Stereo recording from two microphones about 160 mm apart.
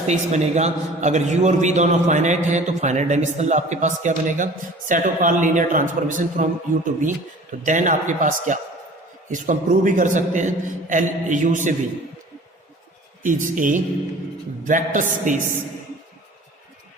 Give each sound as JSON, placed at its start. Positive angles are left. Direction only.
{"t": 0.1, "sound": "a man's voice", "side_deg": -45}
{"t": 13.2, "sound": "a man's voice", "side_deg": -55}